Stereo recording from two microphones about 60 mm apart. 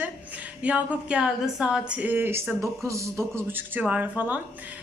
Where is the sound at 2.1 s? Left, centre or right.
Right.